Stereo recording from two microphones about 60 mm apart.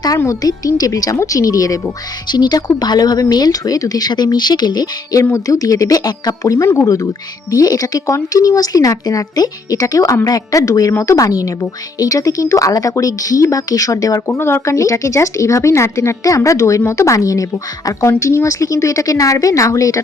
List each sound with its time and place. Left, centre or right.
0.3 s speech: left
5.5 s speech: left
7.5 s speech: left
14.3 s speech: left
16.2 s speech: left
18.2 s speech: left